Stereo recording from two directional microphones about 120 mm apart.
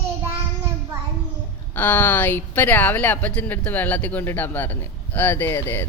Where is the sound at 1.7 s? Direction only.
15° left (ahead or behind).